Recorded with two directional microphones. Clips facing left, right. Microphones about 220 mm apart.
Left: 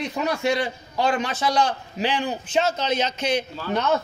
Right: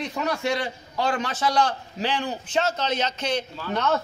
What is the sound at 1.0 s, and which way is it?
A man's voice, 15° left (ahead or behind).